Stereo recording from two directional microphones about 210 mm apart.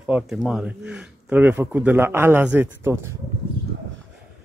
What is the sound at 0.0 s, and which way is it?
A man's voice, 5° right (ahead or behind).